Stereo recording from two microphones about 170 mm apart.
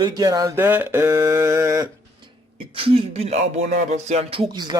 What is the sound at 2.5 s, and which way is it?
Speech, 30° right (ahead or behind).